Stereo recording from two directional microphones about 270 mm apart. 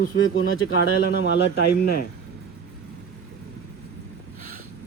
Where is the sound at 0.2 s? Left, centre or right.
Left.